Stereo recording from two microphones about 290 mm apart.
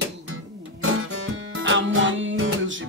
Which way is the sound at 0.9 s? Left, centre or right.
Right.